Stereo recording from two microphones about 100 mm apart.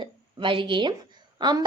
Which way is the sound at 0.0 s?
55° right (ahead or behind).